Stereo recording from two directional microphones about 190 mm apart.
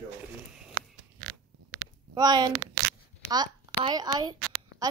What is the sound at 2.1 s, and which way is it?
A woman's voice, 20° right (ahead or behind).